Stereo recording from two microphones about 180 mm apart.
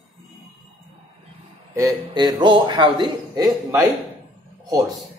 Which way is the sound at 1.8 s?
20° right (ahead or behind).